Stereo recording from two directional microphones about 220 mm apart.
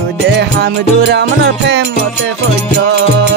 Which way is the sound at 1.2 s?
50° right (ahead or behind).